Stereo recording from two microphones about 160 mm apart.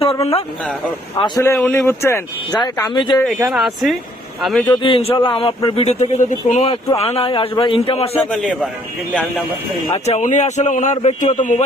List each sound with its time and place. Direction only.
0.0 s speech: 40° left (ahead or behind)
1.4 s speech: 15° left (ahead or behind)
3.4 s speech: centre (ahead or behind)
4.6 s a man's voice: 30° left (ahead or behind)
8.2 s speech: 5° left (ahead or behind)
10.1 s speech: 50° left (ahead or behind)